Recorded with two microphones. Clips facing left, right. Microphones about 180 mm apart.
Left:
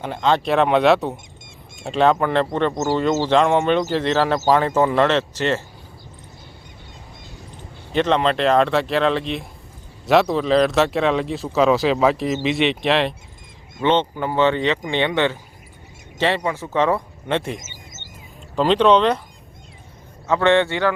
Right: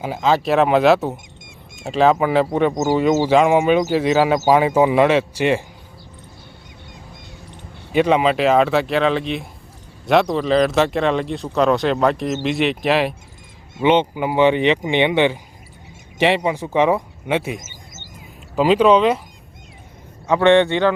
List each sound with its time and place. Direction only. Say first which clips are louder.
0.0 s speech: right 1 dB; 5° right (ahead or behind)
7.9 s speech: right 3 dB; 10° right (ahead or behind)
20.2 s speech: right 3 dB; 15° right (ahead or behind)